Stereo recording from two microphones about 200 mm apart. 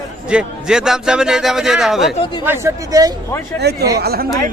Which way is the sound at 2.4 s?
10° right (ahead or behind).